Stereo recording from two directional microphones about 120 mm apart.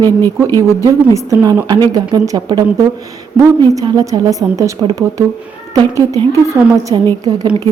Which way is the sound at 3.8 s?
30° right (ahead or behind).